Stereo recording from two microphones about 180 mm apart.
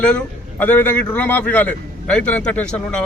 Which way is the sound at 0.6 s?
10° left (ahead or behind).